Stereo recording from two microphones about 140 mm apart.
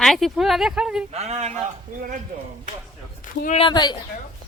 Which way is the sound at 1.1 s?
50° right (ahead or behind).